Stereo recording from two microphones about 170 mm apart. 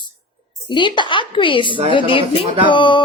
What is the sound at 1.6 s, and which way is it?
Speech, 30° right (ahead or behind).